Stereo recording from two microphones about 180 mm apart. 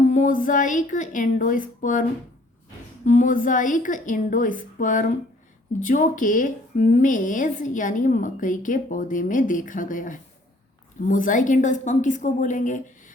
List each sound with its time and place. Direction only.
0.0 s a woman's voice: 45° left (ahead or behind)